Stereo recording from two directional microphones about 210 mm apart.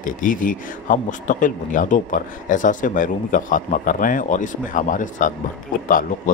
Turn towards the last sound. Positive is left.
turn(degrees=40)  # may be behind; listen again after turning